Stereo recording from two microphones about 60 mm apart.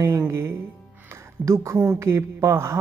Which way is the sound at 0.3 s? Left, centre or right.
Right.